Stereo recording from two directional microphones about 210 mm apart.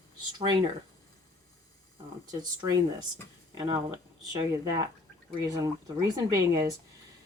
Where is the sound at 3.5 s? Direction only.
20° right (ahead or behind).